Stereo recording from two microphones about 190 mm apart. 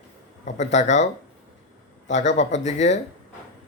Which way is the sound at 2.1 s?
35° left (ahead or behind).